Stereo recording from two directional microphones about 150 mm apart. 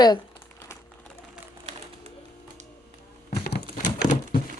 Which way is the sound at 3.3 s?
90° left.